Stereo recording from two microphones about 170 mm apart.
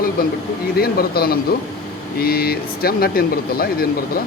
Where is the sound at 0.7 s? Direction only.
65° left (ahead or behind).